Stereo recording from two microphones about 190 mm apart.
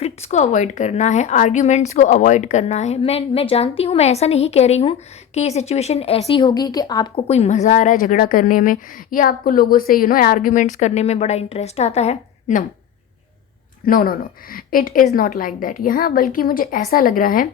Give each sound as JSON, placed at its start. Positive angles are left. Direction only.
{"t": 0.0, "sound": "a woman's voice", "side_deg": 35}
{"t": 7.3, "sound": "speech", "side_deg": 35}
{"t": 13.8, "sound": "speech", "side_deg": 50}